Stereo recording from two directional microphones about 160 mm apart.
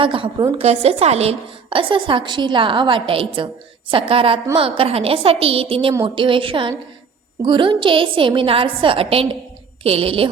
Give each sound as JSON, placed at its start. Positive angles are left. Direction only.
{"t": 0.0, "sound": "a woman's voice", "side_deg": -30}